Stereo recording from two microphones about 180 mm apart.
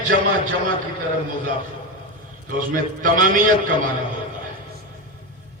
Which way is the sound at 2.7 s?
50° right (ahead or behind).